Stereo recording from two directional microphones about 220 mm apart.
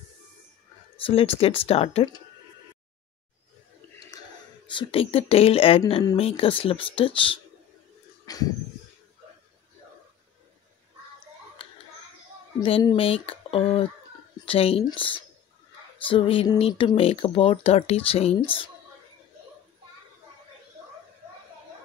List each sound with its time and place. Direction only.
1.0 s speech: 25° left (ahead or behind)
4.6 s speech: 25° left (ahead or behind)
8.3 s a sound: 15° left (ahead or behind)
12.5 s speech: 20° left (ahead or behind)